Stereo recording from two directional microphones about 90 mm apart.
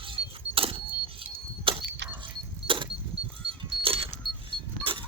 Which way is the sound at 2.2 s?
70° right (ahead or behind).